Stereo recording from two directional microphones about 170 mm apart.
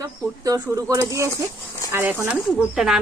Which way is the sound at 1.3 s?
20° left (ahead or behind).